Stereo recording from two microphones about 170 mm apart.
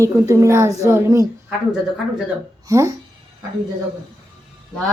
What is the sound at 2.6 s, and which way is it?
Speech, 15° right (ahead or behind).